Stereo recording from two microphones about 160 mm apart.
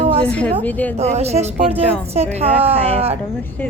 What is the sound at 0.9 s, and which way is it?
A woman's voice, 40° right (ahead or behind).